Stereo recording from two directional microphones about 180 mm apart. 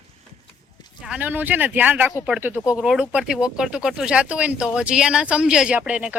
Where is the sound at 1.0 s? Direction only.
10° right (ahead or behind).